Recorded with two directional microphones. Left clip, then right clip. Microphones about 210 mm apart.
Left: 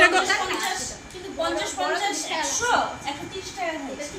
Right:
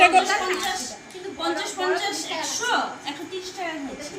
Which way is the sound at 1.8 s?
5° left (ahead or behind).